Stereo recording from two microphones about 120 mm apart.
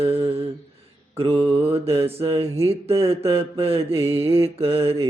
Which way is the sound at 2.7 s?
55° right (ahead or behind).